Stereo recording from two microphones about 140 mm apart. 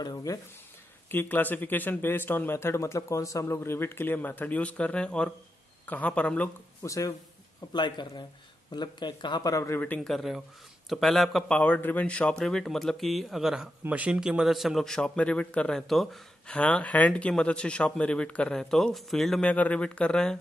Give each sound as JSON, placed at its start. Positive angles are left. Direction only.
{"t": 0.0, "sound": "speech", "side_deg": 25}
{"t": 1.0, "sound": "a man's voice", "side_deg": 15}
{"t": 6.9, "sound": "speech", "side_deg": 20}
{"t": 10.1, "sound": "a man's voice", "side_deg": 0}